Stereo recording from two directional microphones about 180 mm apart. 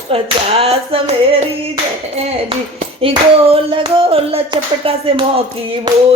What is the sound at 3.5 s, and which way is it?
Hands, 30° right (ahead or behind).